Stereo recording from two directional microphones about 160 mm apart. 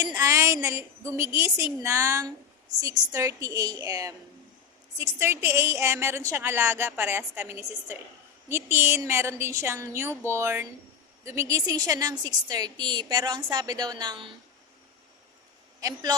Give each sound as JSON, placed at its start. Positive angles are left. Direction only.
{"t": 0.2, "sound": "a woman's voice", "side_deg": -20}
{"t": 15.8, "sound": "a woman's voice", "side_deg": -20}